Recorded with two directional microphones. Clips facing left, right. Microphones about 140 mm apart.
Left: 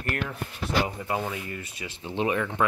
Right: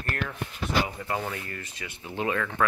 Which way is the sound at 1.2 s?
10° left (ahead or behind).